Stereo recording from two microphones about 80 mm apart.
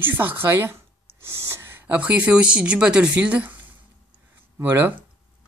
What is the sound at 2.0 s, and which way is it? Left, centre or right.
Speech, centre.